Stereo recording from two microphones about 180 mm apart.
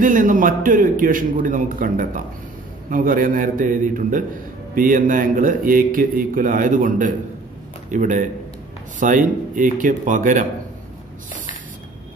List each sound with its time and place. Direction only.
0.0 s a man's voice: 50° right (ahead or behind)